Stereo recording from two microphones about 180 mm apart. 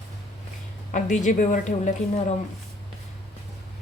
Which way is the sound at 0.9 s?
45° left (ahead or behind).